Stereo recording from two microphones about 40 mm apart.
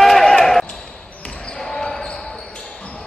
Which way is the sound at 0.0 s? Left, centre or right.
Centre.